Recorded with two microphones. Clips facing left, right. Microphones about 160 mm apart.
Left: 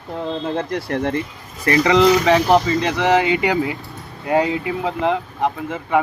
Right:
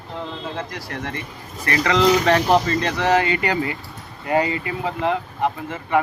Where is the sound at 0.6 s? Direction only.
55° left (ahead or behind).